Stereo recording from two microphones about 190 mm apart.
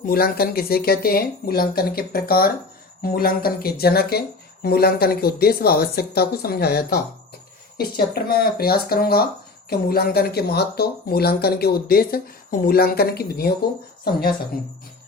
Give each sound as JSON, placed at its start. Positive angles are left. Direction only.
{"t": 0.0, "sound": "speech", "side_deg": 50}